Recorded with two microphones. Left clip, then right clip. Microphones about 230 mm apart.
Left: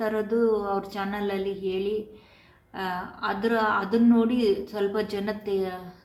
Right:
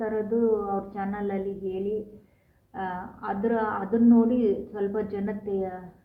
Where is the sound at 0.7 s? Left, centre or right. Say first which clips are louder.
Left 2 dB; centre.